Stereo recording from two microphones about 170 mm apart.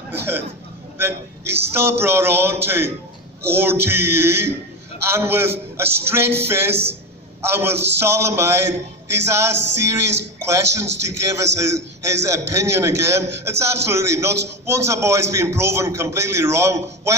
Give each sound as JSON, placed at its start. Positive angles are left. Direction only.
{"t": 0.9, "sound": "a man's voice", "side_deg": -15}